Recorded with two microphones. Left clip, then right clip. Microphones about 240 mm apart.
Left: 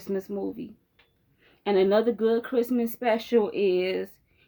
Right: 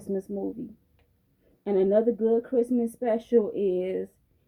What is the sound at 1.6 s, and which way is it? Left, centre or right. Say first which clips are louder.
Speech: left 1 dB; centre.